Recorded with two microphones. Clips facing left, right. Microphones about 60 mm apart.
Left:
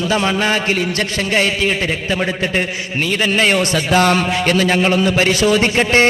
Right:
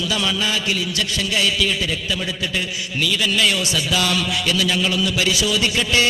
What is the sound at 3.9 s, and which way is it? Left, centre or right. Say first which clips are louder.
A man's voice: left 9 dB; left.